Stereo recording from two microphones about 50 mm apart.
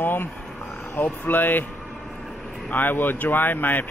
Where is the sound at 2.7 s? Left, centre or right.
Left.